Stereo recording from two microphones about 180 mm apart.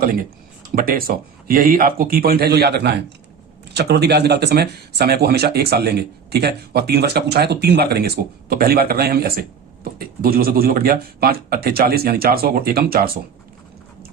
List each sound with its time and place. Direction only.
0.8 s speech: 55° right (ahead or behind)